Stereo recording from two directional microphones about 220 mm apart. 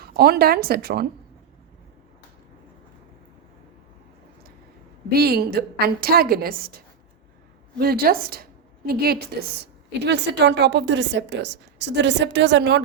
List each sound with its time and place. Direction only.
0.2 s a woman's voice: 45° right (ahead or behind)
5.1 s a woman's voice: 45° right (ahead or behind)